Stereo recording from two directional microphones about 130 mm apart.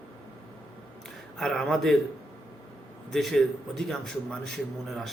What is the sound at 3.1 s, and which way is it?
Speech, 5° left (ahead or behind).